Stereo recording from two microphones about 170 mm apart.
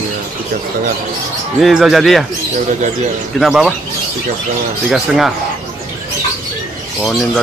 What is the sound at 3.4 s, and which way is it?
Speech, centre (ahead or behind).